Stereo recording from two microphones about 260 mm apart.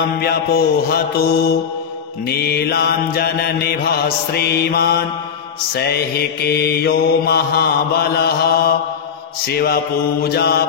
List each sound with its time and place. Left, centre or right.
0.2 s mantra: left
10.2 s mantra: left